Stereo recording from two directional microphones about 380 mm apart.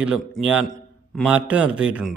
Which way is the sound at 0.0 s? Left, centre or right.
Centre.